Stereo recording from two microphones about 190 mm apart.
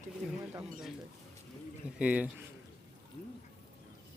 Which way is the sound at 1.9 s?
5° right (ahead or behind).